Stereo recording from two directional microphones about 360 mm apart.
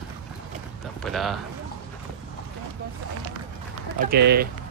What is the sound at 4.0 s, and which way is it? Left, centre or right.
Speech, right.